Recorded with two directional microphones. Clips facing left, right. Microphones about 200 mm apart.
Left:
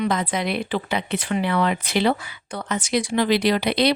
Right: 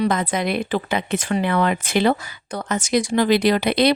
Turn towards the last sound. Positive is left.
turn(degrees=-50)  # may be behind; listen again after turning